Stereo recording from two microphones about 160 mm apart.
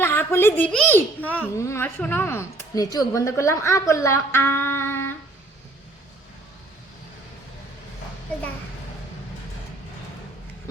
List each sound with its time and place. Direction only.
0.0 s a child's voice: 15° left (ahead or behind)